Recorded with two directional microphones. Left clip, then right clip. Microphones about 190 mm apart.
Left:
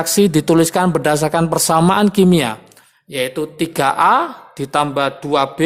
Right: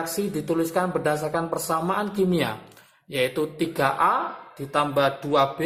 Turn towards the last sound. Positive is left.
turn(degrees=35)  # may be behind; listen again after turning